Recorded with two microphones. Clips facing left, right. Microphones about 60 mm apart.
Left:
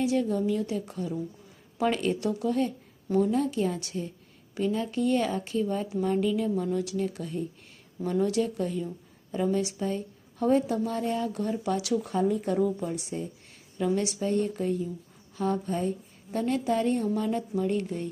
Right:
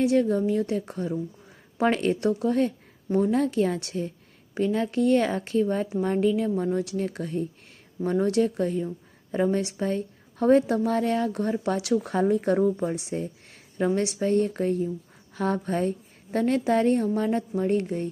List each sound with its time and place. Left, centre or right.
0.0 s a woman's voice: right
3.1 s a woman's voice: right
3.3 s a woman's voice: right
12.5 s speech: right
13.0 s speech: right
14.0 s a woman's voice: right
15.4 s a woman's voice: right